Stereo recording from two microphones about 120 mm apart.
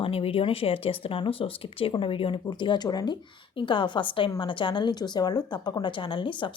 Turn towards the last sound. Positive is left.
turn(degrees=40)  # may be behind; listen again after turning